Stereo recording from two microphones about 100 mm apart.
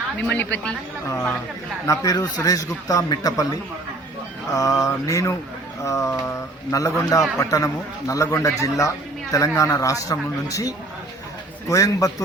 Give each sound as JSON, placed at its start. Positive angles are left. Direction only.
{"t": 0.2, "sound": "speech", "side_deg": 15}
{"t": 1.9, "sound": "a man's voice", "side_deg": 40}